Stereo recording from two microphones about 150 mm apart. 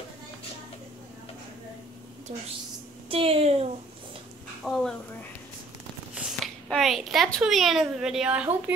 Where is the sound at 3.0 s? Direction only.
40° right (ahead or behind).